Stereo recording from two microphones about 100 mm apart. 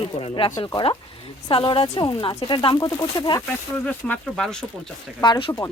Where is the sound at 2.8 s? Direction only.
45° left (ahead or behind).